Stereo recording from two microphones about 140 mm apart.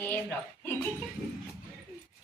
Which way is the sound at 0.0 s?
15° left (ahead or behind).